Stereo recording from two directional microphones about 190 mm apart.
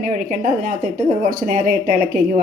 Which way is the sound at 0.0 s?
45° right (ahead or behind).